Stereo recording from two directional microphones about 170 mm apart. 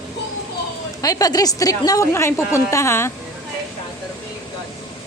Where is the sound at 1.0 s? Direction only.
20° left (ahead or behind).